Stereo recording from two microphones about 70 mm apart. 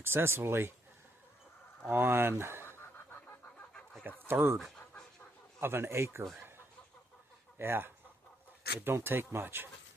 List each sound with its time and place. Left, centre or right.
0.0 s speech: right
1.9 s speech: right
2.6 s fowl: left
4.3 s speech: right
5.5 s speech: right
7.6 s speech: right